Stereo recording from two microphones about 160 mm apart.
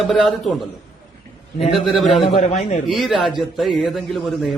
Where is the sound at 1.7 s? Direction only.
Centre (ahead or behind).